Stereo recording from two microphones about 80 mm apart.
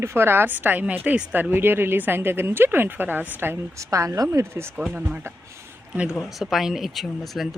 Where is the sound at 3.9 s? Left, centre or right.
Right.